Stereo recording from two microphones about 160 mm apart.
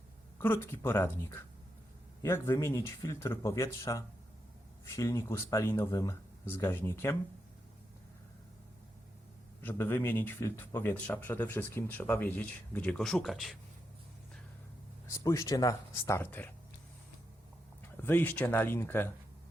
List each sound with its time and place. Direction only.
0.3 s speech: 15° left (ahead or behind)
9.6 s speech: 15° left (ahead or behind)
15.0 s speech: 20° left (ahead or behind)
17.9 s speech: 15° left (ahead or behind)